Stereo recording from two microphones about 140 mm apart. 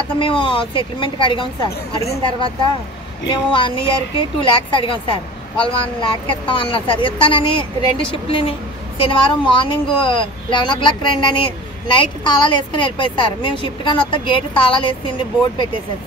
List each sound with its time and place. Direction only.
0.2 s a woman's voice: 40° left (ahead or behind)